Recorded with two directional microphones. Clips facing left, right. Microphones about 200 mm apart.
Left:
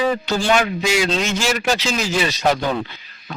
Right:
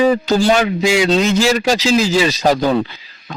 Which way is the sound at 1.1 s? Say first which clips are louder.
Right 7 dB; 35° right (ahead or behind).